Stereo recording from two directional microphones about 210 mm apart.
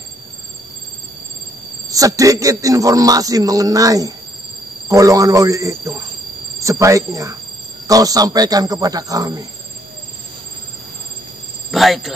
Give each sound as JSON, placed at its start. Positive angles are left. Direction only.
{"t": 1.9, "sound": "a man's voice", "side_deg": -15}
{"t": 11.7, "sound": "speech", "side_deg": 0}